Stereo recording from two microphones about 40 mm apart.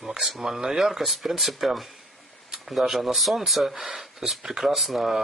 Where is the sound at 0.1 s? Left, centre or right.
Centre.